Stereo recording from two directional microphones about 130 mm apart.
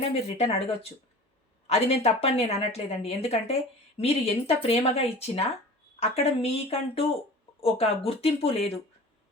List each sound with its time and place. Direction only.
0.0 s speech: 55° left (ahead or behind)